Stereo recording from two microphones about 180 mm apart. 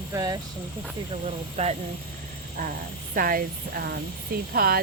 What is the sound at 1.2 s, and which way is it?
Speech, 35° right (ahead or behind).